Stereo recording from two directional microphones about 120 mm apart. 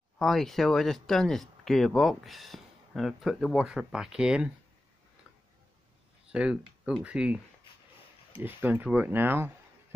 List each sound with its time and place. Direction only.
0.2 s speech: centre (ahead or behind)
6.3 s speech: 5° right (ahead or behind)